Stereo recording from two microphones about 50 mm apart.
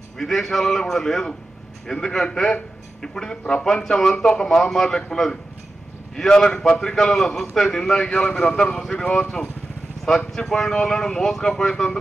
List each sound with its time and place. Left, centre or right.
0.2 s a man's voice: centre